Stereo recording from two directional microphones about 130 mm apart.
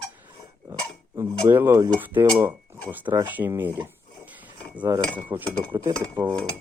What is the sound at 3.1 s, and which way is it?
Speech, 25° right (ahead or behind).